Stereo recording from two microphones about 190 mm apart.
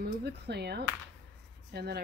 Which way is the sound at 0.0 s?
60° right (ahead or behind).